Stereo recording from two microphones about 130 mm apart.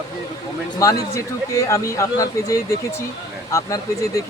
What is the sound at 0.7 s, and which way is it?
A man's voice, 25° left (ahead or behind).